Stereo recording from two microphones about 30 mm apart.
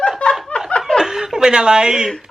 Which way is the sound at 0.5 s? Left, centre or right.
Left.